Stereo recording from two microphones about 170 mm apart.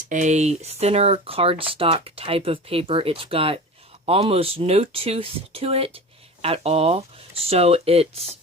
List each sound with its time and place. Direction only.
0.1 s speech: 45° right (ahead or behind)